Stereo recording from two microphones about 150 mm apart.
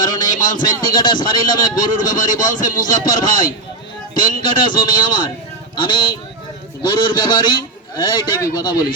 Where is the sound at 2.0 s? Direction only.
60° left (ahead or behind).